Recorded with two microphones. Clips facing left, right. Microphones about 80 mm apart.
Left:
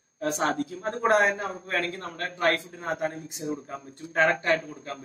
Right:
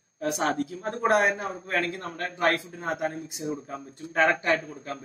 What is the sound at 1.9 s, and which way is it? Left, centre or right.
Speech, right.